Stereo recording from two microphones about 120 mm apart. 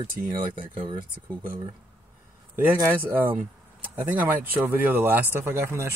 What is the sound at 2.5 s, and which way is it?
Speech, 20° right (ahead or behind).